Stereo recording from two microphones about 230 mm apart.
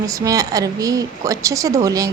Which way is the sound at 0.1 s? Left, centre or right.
Centre.